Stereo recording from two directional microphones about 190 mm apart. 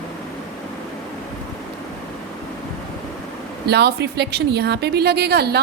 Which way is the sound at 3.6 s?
60° right (ahead or behind).